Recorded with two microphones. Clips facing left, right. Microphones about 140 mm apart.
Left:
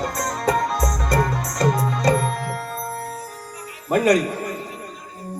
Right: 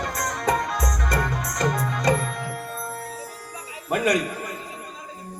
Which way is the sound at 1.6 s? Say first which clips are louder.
Left 4 dB; 35° left (ahead or behind).